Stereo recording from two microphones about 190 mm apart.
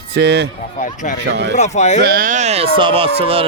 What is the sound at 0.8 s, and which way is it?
Speech, 45° left (ahead or behind).